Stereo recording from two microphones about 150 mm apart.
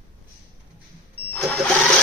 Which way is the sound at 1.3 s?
5° left (ahead or behind).